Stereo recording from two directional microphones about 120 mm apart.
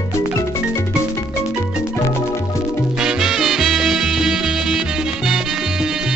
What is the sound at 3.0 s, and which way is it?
Music, 5° right (ahead or behind).